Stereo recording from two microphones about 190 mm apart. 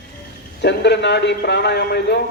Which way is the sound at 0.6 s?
65° left (ahead or behind).